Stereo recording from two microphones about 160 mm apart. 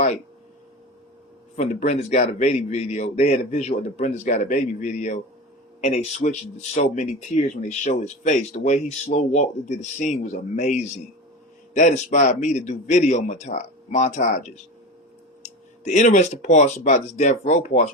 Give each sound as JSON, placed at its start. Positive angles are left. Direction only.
{"t": 1.5, "sound": "speech", "side_deg": 45}